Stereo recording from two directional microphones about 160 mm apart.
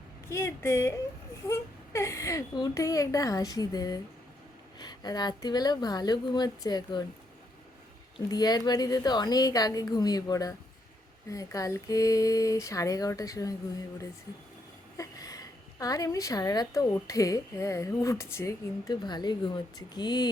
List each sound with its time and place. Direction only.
0.3 s a woman's voice: 15° left (ahead or behind)
8.3 s a woman's voice: 25° left (ahead or behind)
14.9 s a woman's voice: 20° left (ahead or behind)